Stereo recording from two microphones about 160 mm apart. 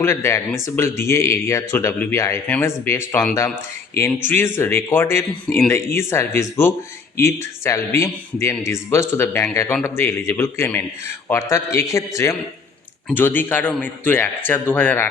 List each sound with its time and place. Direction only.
0.0 s speech: 15° left (ahead or behind)